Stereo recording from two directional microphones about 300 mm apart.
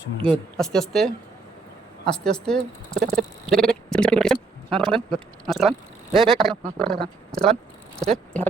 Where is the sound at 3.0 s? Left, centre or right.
Right.